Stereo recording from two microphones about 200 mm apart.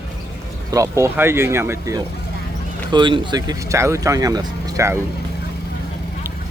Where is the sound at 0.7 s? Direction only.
15° right (ahead or behind).